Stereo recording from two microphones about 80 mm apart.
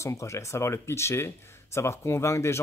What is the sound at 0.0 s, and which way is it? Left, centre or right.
Speech, left.